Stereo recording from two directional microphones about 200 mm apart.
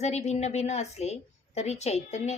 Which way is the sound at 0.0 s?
35° left (ahead or behind).